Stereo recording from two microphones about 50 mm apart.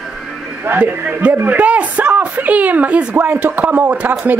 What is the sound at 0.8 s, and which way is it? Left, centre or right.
Speech, right.